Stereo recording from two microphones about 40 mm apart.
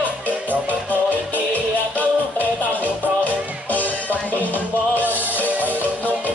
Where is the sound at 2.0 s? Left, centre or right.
Left.